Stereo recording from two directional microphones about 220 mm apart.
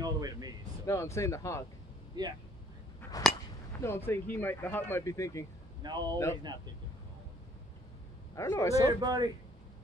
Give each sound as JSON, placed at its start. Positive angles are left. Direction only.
{"t": 0.0, "sound": "a sound", "side_deg": -15}
{"t": 0.8, "sound": "speech", "side_deg": 10}
{"t": 2.1, "sound": "speech", "side_deg": -20}
{"t": 3.0, "sound": "a sound", "side_deg": 15}
{"t": 3.8, "sound": "speech", "side_deg": 10}
{"t": 5.8, "sound": "speech", "side_deg": -20}
{"t": 8.4, "sound": "speech", "side_deg": 15}
{"t": 8.8, "sound": "a man's voice", "side_deg": -20}